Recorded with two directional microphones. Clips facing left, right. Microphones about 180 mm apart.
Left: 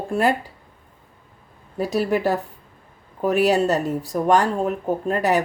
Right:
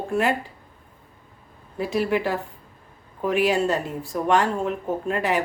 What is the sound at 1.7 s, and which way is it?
Speech, 40° left (ahead or behind).